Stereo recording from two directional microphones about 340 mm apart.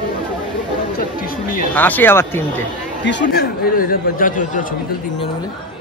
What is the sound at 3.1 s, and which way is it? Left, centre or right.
Speech, left.